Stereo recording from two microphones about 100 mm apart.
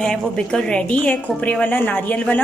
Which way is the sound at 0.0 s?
5° left (ahead or behind).